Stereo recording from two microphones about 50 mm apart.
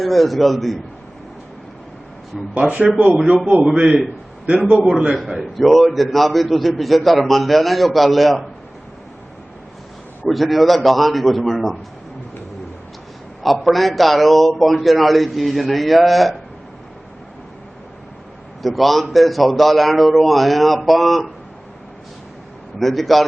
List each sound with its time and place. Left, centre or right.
0.0 s a man's voice: centre
2.6 s speech: right
3.6 s a man's voice: centre
10.2 s a man's voice: centre
13.4 s a man's voice: centre
18.6 s a man's voice: centre
22.8 s a man's voice: centre